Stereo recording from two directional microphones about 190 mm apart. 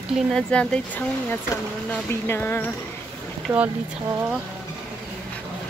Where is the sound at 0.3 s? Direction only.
5° left (ahead or behind).